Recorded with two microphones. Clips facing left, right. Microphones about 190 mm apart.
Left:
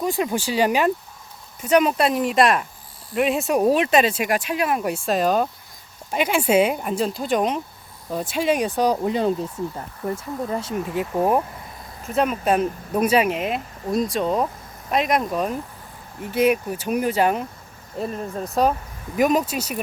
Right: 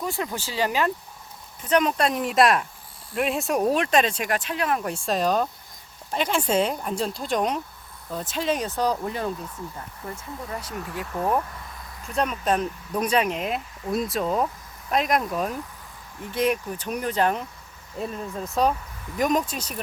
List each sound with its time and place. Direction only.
0.0 s speech: 15° left (ahead or behind)
12.1 s speech: 5° left (ahead or behind)
18.6 s speech: centre (ahead or behind)